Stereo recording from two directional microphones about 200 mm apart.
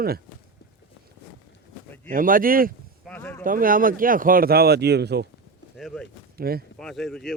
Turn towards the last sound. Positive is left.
turn(degrees=0)  # may be behind; listen again after turning